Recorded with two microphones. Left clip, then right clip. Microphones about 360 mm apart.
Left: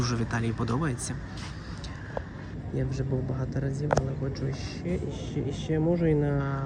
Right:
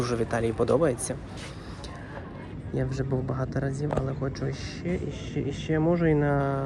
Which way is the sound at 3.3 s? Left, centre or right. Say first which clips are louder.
Right 4 dB; right.